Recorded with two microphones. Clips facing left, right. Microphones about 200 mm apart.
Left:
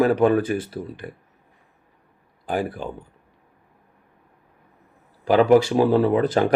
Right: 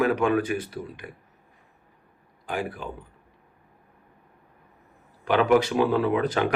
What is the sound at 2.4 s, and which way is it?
Speech, 35° left (ahead or behind).